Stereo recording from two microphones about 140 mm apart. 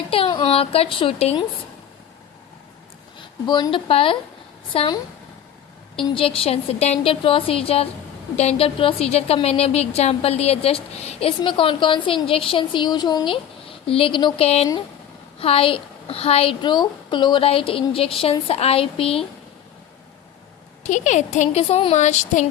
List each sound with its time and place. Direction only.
0.1 s a woman's voice: 35° left (ahead or behind)
3.2 s a woman's voice: 35° left (ahead or behind)
6.1 s a woman's voice: 40° left (ahead or behind)
20.8 s a woman's voice: 60° left (ahead or behind); by 21.9 s 40° left (ahead or behind)
21.9 s a woman's voice: 55° left (ahead or behind)